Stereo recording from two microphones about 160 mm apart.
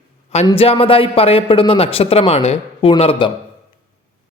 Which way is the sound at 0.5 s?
35° left (ahead or behind).